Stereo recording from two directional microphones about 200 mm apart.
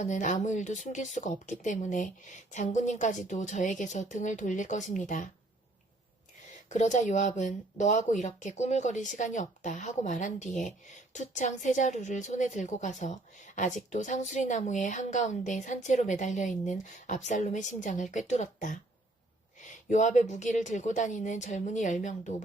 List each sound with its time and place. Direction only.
0.0 s speech: 40° left (ahead or behind)
6.7 s speech: 35° left (ahead or behind)